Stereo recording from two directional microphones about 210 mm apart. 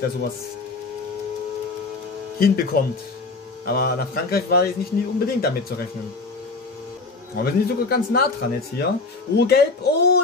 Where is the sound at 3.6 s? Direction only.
50° left (ahead or behind).